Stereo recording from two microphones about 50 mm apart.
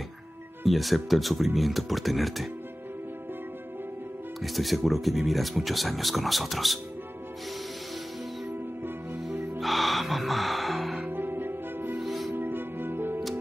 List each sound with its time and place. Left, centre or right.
0.7 s speech: centre
4.4 s speech: centre
9.6 s music: centre
11.1 s music: right
12.0 s music: centre
12.4 s music: right